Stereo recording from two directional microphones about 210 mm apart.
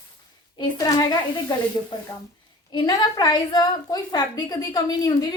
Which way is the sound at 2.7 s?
20° left (ahead or behind).